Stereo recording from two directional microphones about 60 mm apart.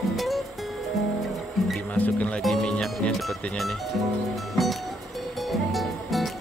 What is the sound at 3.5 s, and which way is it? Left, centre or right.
Speech, centre.